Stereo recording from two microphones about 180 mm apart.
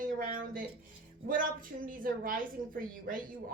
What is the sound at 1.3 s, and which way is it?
A woman's voice, 50° right (ahead or behind).